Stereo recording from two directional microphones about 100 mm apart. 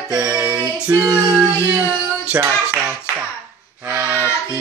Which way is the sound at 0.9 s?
40° right (ahead or behind).